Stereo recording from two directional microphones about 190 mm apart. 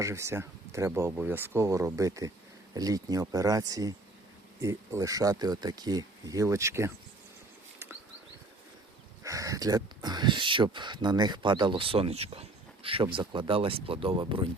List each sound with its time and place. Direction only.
0.0 s speech: 15° right (ahead or behind)
9.2 s speech: 15° right (ahead or behind)